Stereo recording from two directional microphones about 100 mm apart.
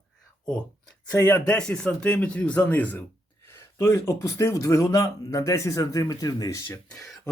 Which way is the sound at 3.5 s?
25° left (ahead or behind).